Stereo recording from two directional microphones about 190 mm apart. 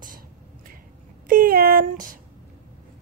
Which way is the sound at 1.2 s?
50° right (ahead or behind).